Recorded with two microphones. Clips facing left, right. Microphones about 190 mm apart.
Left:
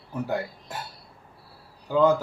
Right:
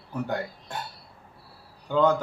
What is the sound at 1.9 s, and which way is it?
Speech, 5° left (ahead or behind).